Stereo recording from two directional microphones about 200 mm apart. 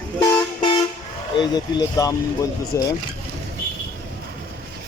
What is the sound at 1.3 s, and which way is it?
Speech, 20° left (ahead or behind).